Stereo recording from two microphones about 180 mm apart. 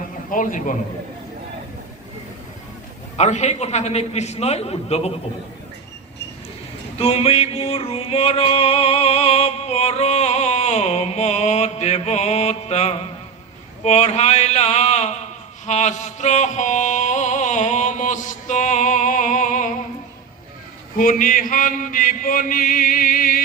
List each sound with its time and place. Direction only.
0.3 s a man's voice: 45° left (ahead or behind)
3.2 s a man's voice: 40° left (ahead or behind)
7.0 s music: 35° left (ahead or behind)
13.8 s speech: 40° left (ahead or behind)
15.6 s music: 40° left (ahead or behind)
20.9 s a man's voice: 50° left (ahead or behind)